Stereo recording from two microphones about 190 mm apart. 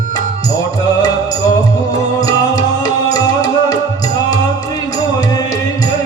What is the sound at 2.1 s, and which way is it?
Music, 20° left (ahead or behind).